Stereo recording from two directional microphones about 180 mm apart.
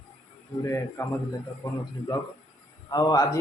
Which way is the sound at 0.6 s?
15° left (ahead or behind).